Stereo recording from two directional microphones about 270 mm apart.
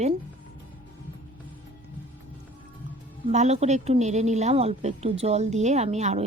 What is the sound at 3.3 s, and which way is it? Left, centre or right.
Speech, right.